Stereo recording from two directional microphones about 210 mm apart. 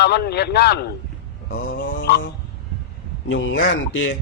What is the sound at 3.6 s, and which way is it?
Speech, 70° left (ahead or behind).